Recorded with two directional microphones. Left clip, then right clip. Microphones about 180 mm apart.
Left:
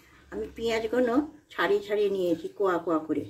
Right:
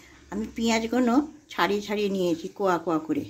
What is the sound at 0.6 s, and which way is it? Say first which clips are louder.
Speech: right 1 dB; 50° right (ahead or behind).